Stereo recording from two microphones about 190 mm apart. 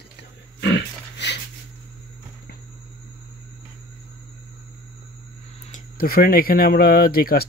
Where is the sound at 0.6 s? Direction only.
65° left (ahead or behind).